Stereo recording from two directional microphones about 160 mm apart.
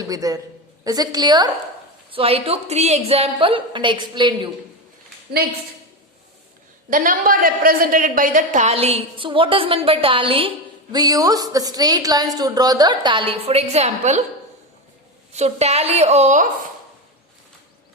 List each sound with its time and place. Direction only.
0.1 s speech: 20° right (ahead or behind)
2.0 s a woman's voice: 35° right (ahead or behind)
6.9 s a woman's voice: 60° right (ahead or behind); by 10.5 s 35° right (ahead or behind)
10.9 s speech: 25° right (ahead or behind); by 14.3 s 45° right (ahead or behind)
15.3 s a woman's voice: 45° right (ahead or behind)